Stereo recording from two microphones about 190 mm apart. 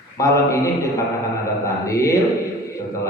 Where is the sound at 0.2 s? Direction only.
15° left (ahead or behind).